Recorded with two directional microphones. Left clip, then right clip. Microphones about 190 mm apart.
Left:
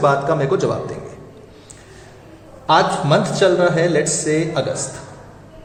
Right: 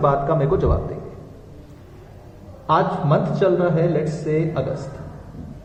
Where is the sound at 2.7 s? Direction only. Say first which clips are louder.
Left 4 dB; 25° left (ahead or behind).